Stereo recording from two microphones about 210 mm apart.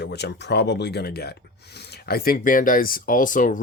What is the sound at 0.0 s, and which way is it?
Speech, 50° left (ahead or behind).